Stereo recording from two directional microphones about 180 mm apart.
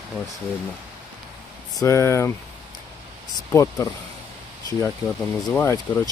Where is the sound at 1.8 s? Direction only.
15° left (ahead or behind).